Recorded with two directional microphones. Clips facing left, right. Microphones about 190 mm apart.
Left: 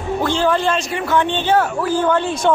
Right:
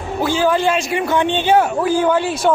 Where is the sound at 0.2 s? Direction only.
5° right (ahead or behind).